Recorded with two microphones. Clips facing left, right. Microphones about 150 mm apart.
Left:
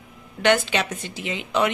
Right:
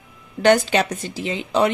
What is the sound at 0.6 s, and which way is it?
A woman's voice, 40° right (ahead or behind).